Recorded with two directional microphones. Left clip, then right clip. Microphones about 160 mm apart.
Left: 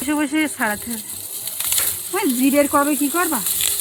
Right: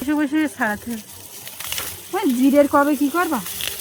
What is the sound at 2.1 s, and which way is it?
Speech, 40° right (ahead or behind).